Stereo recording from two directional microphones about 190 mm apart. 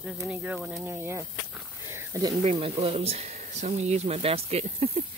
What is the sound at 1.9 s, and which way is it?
Snake, 15° right (ahead or behind).